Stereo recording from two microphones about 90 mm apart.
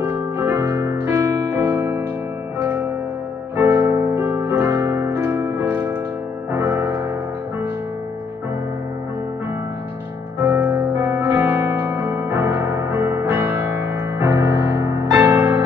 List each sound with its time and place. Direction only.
0.0 s piano: 20° right (ahead or behind)
0.7 s music: 30° right (ahead or behind)
3.5 s piano: 20° right (ahead or behind)
5.2 s music: 20° right (ahead or behind)
10.4 s music: 20° right (ahead or behind)